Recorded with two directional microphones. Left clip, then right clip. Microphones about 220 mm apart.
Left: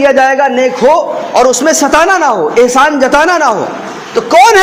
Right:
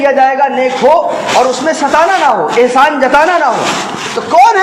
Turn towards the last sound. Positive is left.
turn(degrees=45)  # may be behind; listen again after turning